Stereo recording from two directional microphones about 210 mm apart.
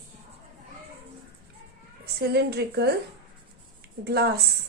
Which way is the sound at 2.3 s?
50° right (ahead or behind).